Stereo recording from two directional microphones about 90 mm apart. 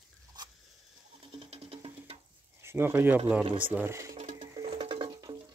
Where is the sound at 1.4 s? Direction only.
90° right.